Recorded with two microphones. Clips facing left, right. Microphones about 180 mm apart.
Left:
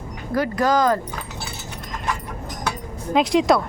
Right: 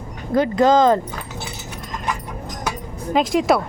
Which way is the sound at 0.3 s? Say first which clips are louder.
Right 5 dB; 25° right (ahead or behind).